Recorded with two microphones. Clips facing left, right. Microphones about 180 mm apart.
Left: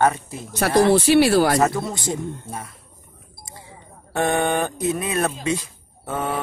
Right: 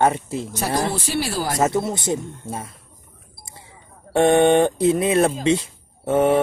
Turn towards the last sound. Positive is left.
turn(degrees=-25)  # may be behind; listen again after turning